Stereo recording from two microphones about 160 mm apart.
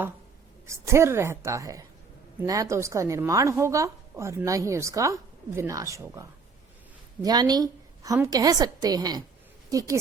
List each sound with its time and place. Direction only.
0.7 s a woman's voice: 15° right (ahead or behind)